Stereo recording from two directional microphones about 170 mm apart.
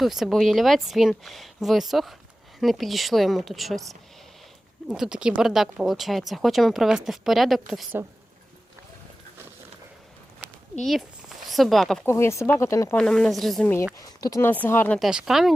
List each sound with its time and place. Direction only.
0.0 s speech: centre (ahead or behind)
10.8 s speech: centre (ahead or behind)
12.0 s speech: 15° left (ahead or behind)
13.0 s speech: 5° left (ahead or behind)
13.9 s speech: 20° left (ahead or behind)
14.9 s speech: centre (ahead or behind)